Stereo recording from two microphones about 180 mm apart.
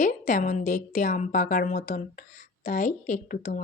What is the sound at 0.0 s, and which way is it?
A woman's voice, 45° left (ahead or behind).